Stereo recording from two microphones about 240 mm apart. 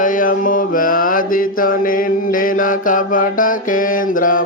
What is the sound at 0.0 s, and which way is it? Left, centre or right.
Mantra, left.